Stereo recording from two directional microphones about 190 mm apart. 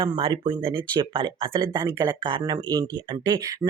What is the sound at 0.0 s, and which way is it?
Speech, 25° right (ahead or behind).